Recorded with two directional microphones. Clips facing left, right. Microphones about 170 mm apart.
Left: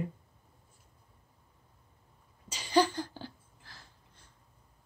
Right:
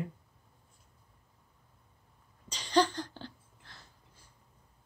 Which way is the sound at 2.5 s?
5° left (ahead or behind).